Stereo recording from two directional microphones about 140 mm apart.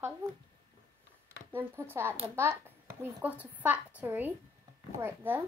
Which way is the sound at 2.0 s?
20° right (ahead or behind).